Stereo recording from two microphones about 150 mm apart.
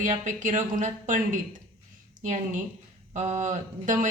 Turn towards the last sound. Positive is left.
turn(degrees=-55)  # may be behind; listen again after turning